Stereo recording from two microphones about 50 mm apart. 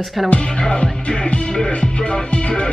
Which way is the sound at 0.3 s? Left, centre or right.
Centre.